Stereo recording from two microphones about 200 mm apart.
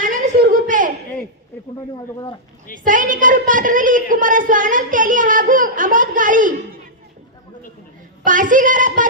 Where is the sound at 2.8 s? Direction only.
40° right (ahead or behind).